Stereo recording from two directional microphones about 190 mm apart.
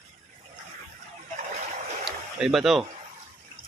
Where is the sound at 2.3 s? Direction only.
Centre (ahead or behind).